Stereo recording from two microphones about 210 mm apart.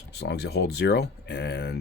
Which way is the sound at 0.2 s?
50° left (ahead or behind).